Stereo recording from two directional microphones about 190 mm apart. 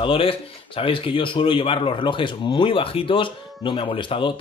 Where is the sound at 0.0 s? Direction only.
30° left (ahead or behind).